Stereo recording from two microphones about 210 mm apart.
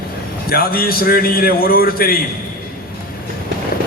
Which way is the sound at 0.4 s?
45° left (ahead or behind).